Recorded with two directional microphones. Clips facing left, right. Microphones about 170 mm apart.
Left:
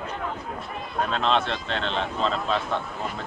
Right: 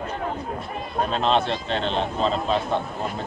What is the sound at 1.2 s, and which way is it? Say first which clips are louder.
Speech: right 3 dB; 10° right (ahead or behind).